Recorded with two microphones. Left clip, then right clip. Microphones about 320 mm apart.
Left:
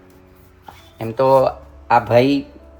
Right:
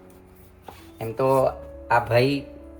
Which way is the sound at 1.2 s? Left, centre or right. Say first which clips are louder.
Left 7 dB; left.